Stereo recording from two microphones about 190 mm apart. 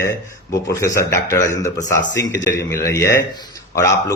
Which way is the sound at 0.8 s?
15° left (ahead or behind).